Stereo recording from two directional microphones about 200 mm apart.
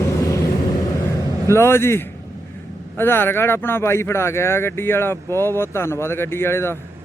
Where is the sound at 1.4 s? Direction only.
15° left (ahead or behind).